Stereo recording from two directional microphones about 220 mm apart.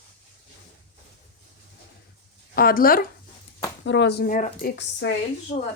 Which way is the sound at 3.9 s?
55° left (ahead or behind).